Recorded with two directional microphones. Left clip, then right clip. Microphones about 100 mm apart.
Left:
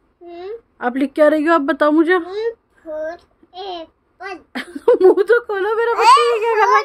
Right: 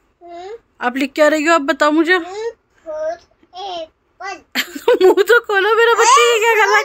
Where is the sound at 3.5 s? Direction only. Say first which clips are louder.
Right 2 dB; 90° left.